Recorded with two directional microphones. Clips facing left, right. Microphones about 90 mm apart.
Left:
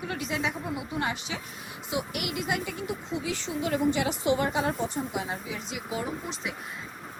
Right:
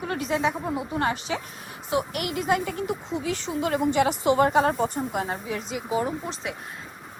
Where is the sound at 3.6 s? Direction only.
55° right (ahead or behind); by 6.5 s 40° right (ahead or behind).